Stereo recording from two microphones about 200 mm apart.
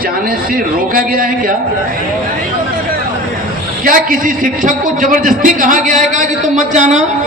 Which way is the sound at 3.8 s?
40° right (ahead or behind).